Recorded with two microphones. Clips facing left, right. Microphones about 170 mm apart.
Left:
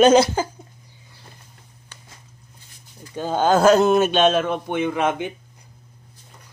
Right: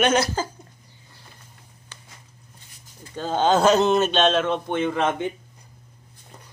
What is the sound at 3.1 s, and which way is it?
Speech, 10° left (ahead or behind).